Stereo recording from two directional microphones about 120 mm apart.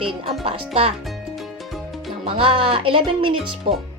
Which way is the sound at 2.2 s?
50° right (ahead or behind).